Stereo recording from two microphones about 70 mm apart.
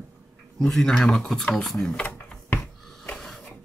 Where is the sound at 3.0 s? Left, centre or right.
Centre.